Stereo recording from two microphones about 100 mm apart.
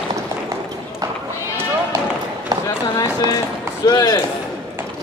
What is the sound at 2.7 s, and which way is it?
Run, 35° left (ahead or behind).